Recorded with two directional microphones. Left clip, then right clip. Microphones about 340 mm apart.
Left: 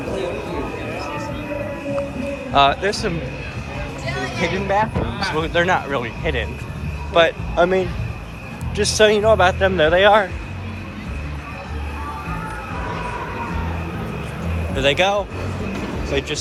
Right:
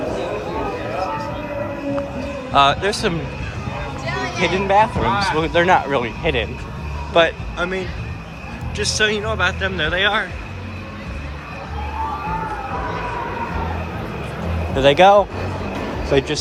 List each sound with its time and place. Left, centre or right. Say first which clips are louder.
2.5 s speech: right 1 dB; centre
4.4 s speech: right 5 dB; centre
7.5 s speech: left 6 dB; centre
14.8 s speech: right 6 dB; centre